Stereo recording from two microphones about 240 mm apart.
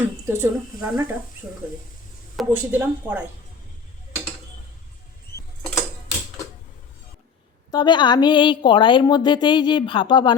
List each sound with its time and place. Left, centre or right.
0.3 s a woman's voice: centre
2.3 s a woman's voice: centre
5.3 s a sound: left
7.7 s a woman's voice: centre